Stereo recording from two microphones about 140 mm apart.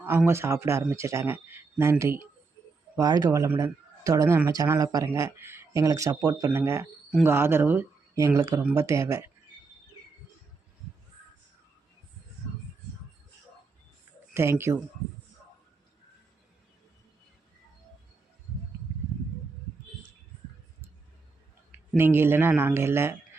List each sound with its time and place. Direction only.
0.0 s speech: 15° right (ahead or behind)
14.3 s speech: 20° right (ahead or behind)
21.9 s speech: 15° right (ahead or behind)